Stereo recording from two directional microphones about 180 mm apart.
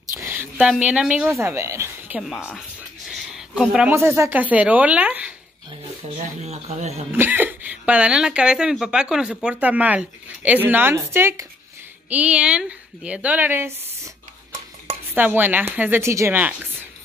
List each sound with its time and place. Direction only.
0.1 s a woman's voice: 10° right (ahead or behind)
5.7 s speech: 35° right (ahead or behind)
7.1 s speech: 10° right (ahead or behind)
15.1 s speech: 10° right (ahead or behind)